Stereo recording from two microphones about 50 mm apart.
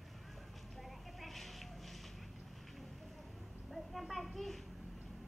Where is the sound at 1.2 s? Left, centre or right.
Centre.